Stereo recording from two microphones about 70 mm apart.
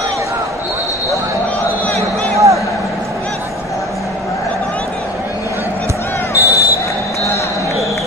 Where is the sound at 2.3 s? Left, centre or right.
Right.